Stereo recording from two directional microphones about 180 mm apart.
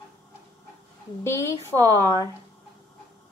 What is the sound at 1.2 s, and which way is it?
A woman's voice, 15° left (ahead or behind).